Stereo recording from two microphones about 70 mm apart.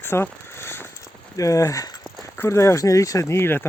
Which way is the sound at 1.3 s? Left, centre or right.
Left.